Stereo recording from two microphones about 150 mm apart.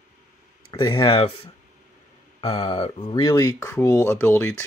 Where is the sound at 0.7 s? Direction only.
30° left (ahead or behind).